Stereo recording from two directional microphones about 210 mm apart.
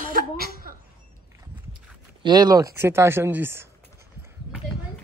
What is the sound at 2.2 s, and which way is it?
Speech, 20° right (ahead or behind).